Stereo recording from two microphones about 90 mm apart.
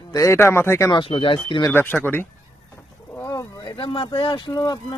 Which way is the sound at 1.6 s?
25° left (ahead or behind).